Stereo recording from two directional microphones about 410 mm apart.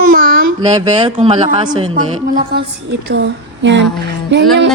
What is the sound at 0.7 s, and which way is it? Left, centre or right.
A woman's voice, centre.